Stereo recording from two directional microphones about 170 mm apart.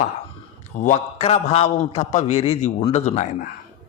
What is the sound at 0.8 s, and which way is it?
A man's voice, 45° left (ahead or behind).